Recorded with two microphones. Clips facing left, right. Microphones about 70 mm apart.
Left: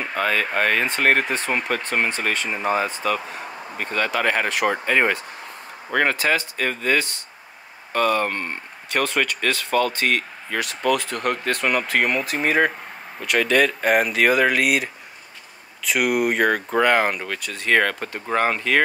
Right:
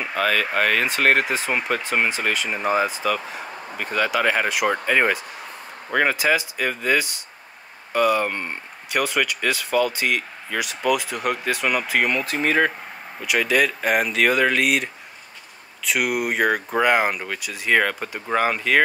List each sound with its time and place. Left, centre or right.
0.0 s speech: centre
13.2 s speech: centre